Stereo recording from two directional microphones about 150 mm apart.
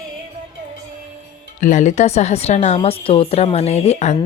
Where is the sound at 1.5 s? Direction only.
60° left (ahead or behind).